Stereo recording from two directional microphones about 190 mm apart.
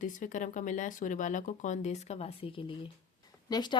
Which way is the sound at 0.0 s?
40° left (ahead or behind).